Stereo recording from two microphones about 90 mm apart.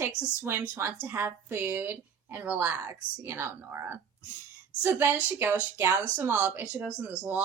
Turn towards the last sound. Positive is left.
turn(degrees=-15)  # may be behind; listen again after turning